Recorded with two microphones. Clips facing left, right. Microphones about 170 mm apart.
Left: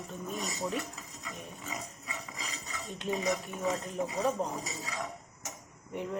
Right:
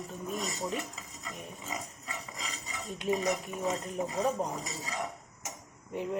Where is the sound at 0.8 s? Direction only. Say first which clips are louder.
Left 1 dB; 20° right (ahead or behind).